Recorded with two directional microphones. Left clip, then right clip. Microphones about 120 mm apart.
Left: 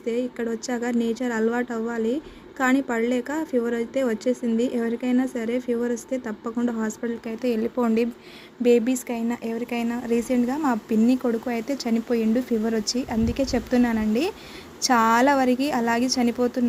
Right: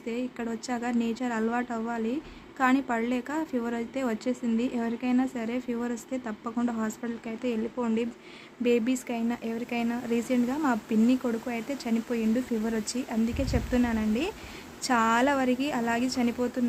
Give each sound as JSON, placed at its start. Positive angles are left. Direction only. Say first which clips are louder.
{"t": 0.0, "sound": "speech", "louder": "left 7 dB", "side_deg": 20}
{"t": 7.3, "sound": "a woman's voice", "louder": "left 6 dB", "side_deg": 35}
{"t": 8.6, "sound": "a woman's voice", "louder": "left 6 dB", "side_deg": 25}